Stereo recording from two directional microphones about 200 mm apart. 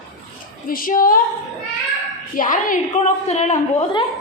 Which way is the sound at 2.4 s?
40° left (ahead or behind).